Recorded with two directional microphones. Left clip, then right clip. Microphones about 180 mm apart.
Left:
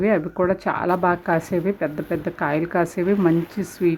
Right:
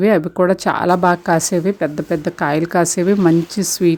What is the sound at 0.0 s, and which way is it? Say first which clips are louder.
Speech: right 6 dB; 50° right (ahead or behind).